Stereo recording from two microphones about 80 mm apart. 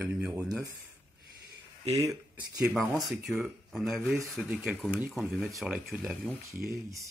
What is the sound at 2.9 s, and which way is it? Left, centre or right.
Speech, centre.